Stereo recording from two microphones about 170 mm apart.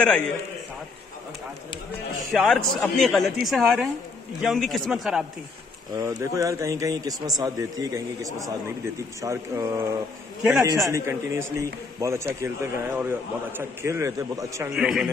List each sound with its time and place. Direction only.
2.3 s a man's voice: centre (ahead or behind)
5.9 s a man's voice: 20° right (ahead or behind)
14.8 s a man's voice: centre (ahead or behind)